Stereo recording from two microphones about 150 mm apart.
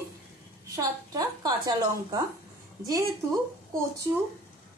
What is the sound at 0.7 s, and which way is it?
A woman's voice, 25° right (ahead or behind).